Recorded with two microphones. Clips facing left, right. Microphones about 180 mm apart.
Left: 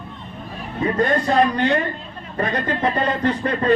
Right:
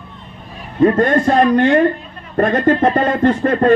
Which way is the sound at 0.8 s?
50° right (ahead or behind).